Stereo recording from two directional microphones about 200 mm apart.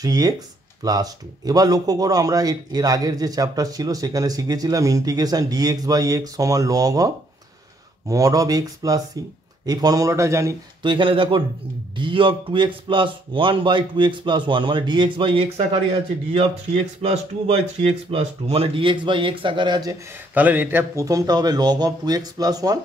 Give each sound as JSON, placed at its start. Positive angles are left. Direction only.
{"t": 0.0, "sound": "a man's voice", "side_deg": -20}
{"t": 8.1, "sound": "a man's voice", "side_deg": -15}
{"t": 20.3, "sound": "speech", "side_deg": -10}